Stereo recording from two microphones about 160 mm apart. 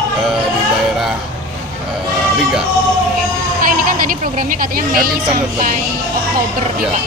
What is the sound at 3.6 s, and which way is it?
Speech, 60° right (ahead or behind).